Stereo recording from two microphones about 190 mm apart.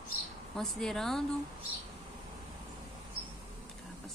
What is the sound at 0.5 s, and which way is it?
Speech, centre (ahead or behind).